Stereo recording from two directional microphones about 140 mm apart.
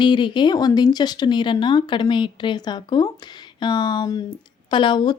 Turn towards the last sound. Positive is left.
turn(degrees=30)  # may be behind; listen again after turning